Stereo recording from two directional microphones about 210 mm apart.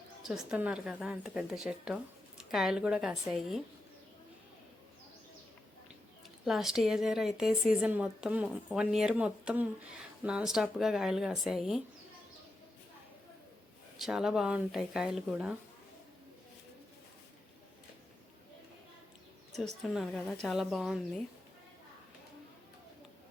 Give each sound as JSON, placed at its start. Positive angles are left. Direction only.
{"t": 0.2, "sound": "speech", "side_deg": 0}
{"t": 6.4, "sound": "speech", "side_deg": 0}
{"t": 14.0, "sound": "speech", "side_deg": 0}
{"t": 19.8, "sound": "speech", "side_deg": 0}